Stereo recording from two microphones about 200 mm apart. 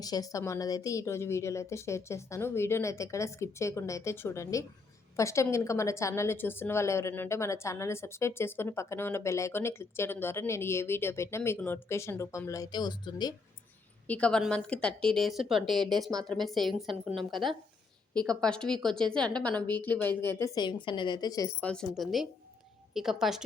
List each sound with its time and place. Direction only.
0.0 s a woman's voice: 20° left (ahead or behind)
14.1 s a woman's voice: 5° left (ahead or behind)
20.8 s a woman's voice: 25° left (ahead or behind)
21.7 s a woman's voice: centre (ahead or behind)